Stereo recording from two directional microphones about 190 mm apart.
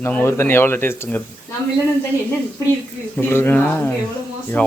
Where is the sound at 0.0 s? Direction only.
10° left (ahead or behind).